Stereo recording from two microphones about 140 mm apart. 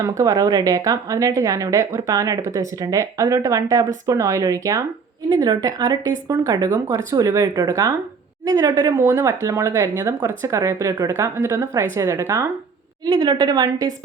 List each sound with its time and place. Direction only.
0.2 s a woman's voice: 25° right (ahead or behind)